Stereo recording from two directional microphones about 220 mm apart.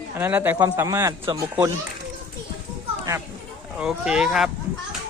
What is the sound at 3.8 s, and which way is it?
Speech, 5° right (ahead or behind).